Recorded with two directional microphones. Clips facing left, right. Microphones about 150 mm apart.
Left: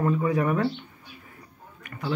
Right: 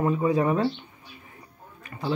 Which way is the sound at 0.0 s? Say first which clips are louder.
Right 1 dB; 20° right (ahead or behind).